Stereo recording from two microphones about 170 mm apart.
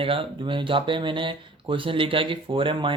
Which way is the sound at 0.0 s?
30° right (ahead or behind).